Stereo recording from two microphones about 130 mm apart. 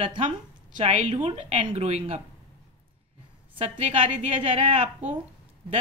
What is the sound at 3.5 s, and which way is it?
A woman's voice, 60° right (ahead or behind).